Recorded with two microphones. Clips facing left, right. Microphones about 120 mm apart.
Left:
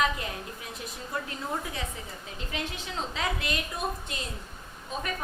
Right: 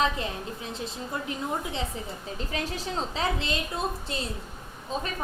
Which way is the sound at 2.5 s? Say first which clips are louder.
Right 3 dB; 35° right (ahead or behind).